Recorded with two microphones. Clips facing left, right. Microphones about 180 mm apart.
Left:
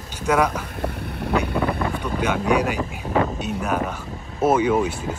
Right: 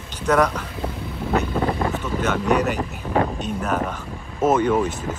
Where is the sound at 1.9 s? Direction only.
10° left (ahead or behind).